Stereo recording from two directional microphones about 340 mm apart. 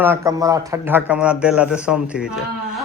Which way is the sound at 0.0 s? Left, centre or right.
Centre.